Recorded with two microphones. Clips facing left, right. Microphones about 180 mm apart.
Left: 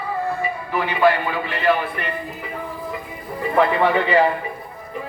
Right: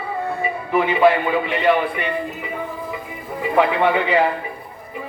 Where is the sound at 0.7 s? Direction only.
20° right (ahead or behind).